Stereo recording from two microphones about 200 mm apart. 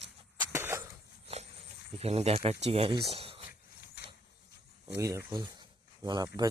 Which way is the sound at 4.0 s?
50° left (ahead or behind).